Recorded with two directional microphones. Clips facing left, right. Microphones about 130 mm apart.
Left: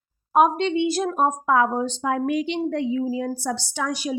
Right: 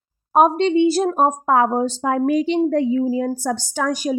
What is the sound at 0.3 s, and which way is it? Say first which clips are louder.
A woman's voice: right 4 dB; 35° right (ahead or behind).